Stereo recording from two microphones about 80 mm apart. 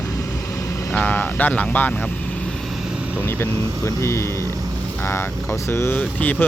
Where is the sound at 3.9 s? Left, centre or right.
Left.